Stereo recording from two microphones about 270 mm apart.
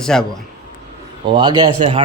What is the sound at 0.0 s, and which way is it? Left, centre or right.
Speech, centre.